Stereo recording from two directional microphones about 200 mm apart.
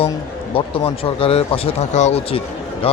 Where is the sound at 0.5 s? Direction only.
25° left (ahead or behind).